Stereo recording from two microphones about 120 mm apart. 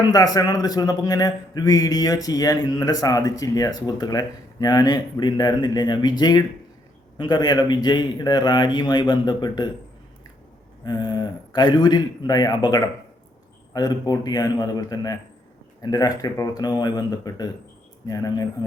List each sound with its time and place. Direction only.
0.1 s a man's voice: 30° left (ahead or behind)
10.8 s a man's voice: 35° left (ahead or behind)